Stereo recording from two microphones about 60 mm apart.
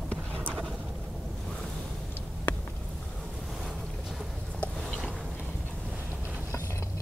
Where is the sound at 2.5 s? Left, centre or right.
Left.